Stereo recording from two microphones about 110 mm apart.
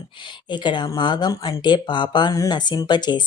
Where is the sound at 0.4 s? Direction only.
45° left (ahead or behind).